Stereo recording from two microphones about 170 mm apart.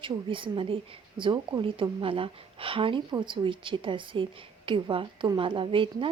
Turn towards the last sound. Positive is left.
turn(degrees=-30)  # may be behind; listen again after turning